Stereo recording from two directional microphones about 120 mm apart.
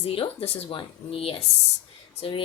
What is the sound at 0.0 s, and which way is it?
Child singing, 50° left (ahead or behind).